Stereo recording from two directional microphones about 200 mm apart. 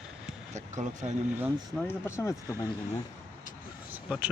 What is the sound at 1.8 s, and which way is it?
Speech, 10° left (ahead or behind).